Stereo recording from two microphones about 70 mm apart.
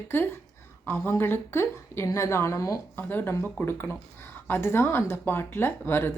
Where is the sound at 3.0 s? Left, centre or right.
Left.